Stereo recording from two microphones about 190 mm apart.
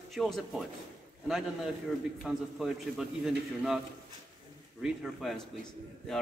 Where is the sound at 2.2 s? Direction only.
Centre (ahead or behind).